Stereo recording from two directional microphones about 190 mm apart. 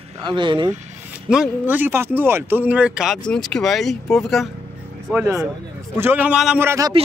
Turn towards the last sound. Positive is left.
turn(degrees=-15)  # may be behind; listen again after turning